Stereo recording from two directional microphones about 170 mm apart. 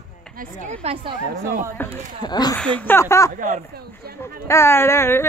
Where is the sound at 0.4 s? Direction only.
45° right (ahead or behind).